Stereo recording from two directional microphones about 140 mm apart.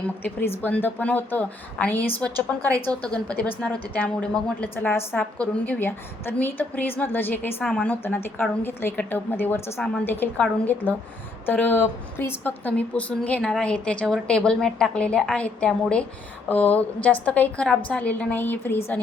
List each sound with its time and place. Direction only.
0.2 s a woman's voice: 15° left (ahead or behind)